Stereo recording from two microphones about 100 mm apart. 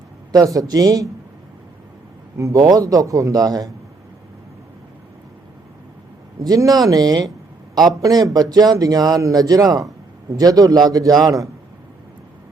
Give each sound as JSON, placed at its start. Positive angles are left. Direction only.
{"t": 0.3, "sound": "speech", "side_deg": -35}
{"t": 2.4, "sound": "speech", "side_deg": -35}
{"t": 6.4, "sound": "speech", "side_deg": -40}